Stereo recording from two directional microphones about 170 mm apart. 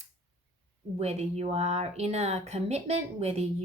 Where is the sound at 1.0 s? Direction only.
40° right (ahead or behind).